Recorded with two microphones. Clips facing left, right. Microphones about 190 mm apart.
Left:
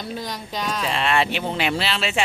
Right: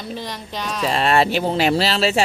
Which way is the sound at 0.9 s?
40° right (ahead or behind).